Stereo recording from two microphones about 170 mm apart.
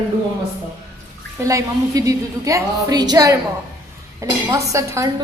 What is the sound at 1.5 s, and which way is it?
A woman's voice, 20° right (ahead or behind).